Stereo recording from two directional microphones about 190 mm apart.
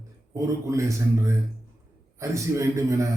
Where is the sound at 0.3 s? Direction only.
15° right (ahead or behind).